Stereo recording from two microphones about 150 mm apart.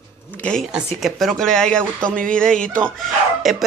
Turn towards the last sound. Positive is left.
turn(degrees=0)  # may be behind; listen again after turning